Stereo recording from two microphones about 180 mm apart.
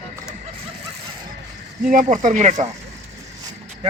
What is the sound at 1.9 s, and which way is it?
Speech, 45° right (ahead or behind).